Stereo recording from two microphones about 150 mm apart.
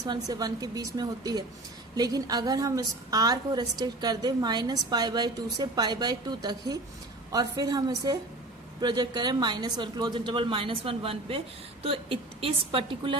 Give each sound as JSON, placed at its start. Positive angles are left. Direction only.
{"t": 0.0, "sound": "a woman's voice", "side_deg": -25}